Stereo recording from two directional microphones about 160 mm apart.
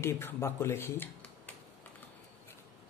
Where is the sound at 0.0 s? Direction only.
15° left (ahead or behind).